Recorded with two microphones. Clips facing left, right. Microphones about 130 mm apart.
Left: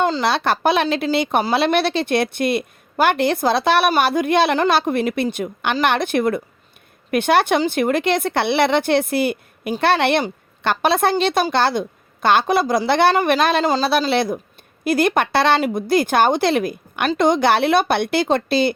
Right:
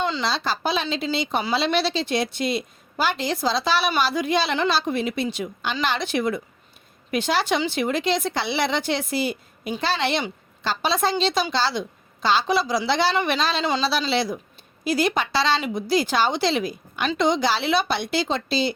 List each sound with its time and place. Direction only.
0.0 s a woman's voice: 55° left (ahead or behind)